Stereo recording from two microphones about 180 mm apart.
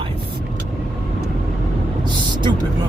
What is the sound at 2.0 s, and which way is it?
Vehicle, 25° right (ahead or behind).